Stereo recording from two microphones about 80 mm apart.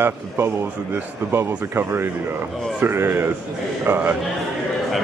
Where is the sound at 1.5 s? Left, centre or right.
Centre.